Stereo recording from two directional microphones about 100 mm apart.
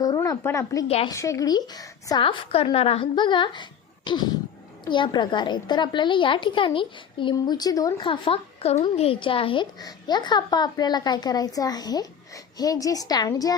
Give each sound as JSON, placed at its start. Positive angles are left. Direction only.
{"t": 0.2, "sound": "a woman's voice", "side_deg": 30}
{"t": 2.2, "sound": "a woman's voice", "side_deg": 65}
{"t": 3.2, "sound": "a woman's voice", "side_deg": 50}
{"t": 7.3, "sound": "a woman's voice", "side_deg": 40}
{"t": 8.0, "sound": "a woman's voice", "side_deg": 55}
{"t": 9.8, "sound": "a woman's voice", "side_deg": 45}